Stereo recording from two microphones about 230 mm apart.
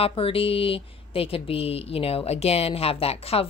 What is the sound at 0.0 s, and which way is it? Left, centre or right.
Speech, left.